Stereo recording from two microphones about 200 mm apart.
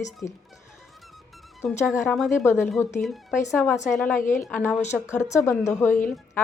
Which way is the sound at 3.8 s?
Centre (ahead or behind).